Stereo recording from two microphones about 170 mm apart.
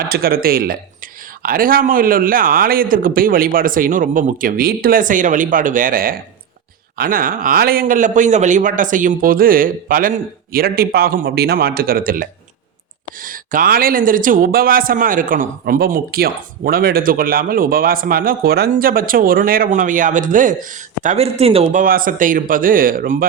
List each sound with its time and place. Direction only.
0.1 s a man's voice: 60° right (ahead or behind)